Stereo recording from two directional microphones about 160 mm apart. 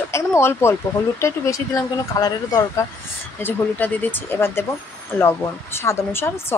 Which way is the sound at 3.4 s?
10° left (ahead or behind).